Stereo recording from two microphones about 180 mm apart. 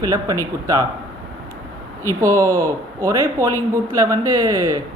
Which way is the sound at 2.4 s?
15° right (ahead or behind).